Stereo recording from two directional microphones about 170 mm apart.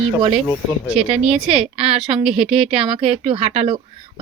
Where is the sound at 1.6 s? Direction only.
35° right (ahead or behind).